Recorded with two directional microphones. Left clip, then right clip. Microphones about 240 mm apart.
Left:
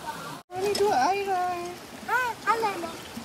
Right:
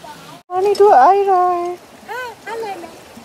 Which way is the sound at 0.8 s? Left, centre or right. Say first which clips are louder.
Right 15 dB; centre.